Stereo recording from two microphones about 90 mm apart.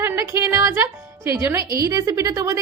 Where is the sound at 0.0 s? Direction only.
35° right (ahead or behind).